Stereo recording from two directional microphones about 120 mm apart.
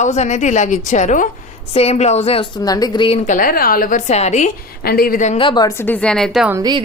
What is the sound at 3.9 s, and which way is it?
Speech, 75° left (ahead or behind).